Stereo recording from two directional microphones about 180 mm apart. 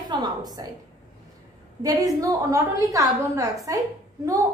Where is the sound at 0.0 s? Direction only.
25° right (ahead or behind).